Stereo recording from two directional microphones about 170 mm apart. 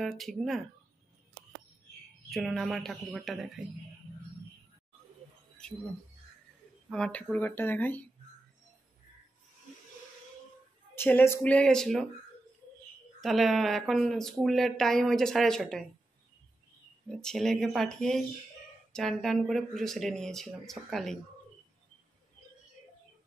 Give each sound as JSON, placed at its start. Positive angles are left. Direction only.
{"t": 0.0, "sound": "speech", "side_deg": 0}
{"t": 2.2, "sound": "speech", "side_deg": 0}
{"t": 6.9, "sound": "speech", "side_deg": 5}
{"t": 11.0, "sound": "speech", "side_deg": 10}
{"t": 13.2, "sound": "speech", "side_deg": 0}
{"t": 17.1, "sound": "speech", "side_deg": 5}